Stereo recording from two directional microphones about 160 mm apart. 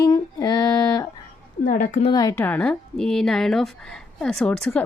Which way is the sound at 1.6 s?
55° left (ahead or behind).